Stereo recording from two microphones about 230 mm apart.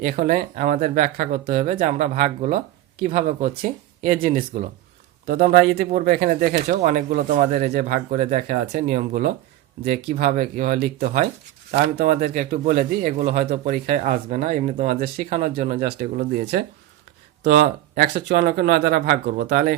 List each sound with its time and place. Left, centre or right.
0.0 s speech: right